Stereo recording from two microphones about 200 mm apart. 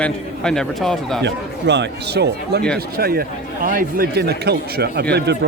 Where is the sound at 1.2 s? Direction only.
60° right (ahead or behind).